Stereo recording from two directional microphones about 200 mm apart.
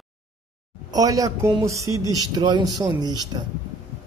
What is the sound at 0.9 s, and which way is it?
Speech, 20° right (ahead or behind).